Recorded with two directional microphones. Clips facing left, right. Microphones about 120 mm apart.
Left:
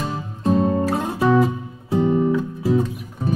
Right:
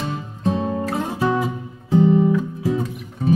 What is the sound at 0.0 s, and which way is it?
Music, centre (ahead or behind).